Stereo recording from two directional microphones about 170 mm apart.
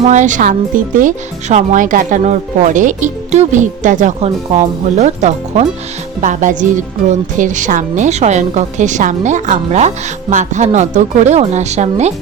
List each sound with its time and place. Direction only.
0.0 s speech: 45° right (ahead or behind)